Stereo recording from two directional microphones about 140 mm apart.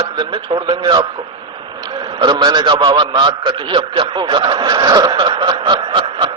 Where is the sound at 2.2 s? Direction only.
30° right (ahead or behind).